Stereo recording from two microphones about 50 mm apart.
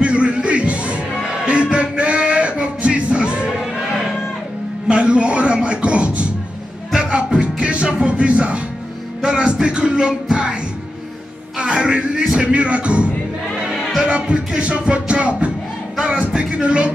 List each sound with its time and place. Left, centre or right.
0.0 s music: right
4.8 s music: right
13.7 s music: centre
14.0 s music: right